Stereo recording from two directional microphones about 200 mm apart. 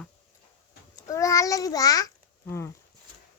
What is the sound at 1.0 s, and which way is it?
A child's voice, 15° left (ahead or behind).